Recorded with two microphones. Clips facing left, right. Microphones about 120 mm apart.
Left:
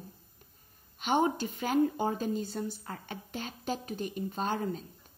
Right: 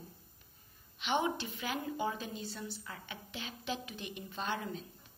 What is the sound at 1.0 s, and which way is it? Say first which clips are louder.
A woman's voice: left 5 dB; 45° left (ahead or behind).